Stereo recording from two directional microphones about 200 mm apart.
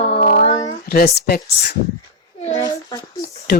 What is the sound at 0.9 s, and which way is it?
Speech, 50° left (ahead or behind).